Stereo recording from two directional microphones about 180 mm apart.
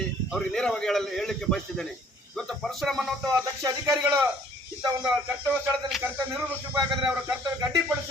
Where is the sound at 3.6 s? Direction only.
15° right (ahead or behind).